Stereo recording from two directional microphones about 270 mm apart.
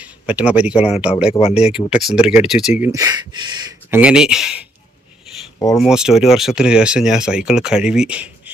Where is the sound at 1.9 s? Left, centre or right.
Centre.